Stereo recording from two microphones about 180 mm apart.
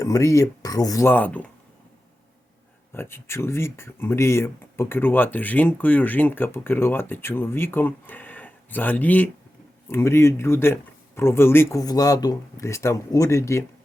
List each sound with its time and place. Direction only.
0.0 s speech: 15° left (ahead or behind)
2.9 s speech: 15° left (ahead or behind)